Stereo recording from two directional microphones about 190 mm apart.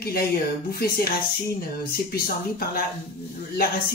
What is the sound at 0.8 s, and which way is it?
Speech, 55° left (ahead or behind).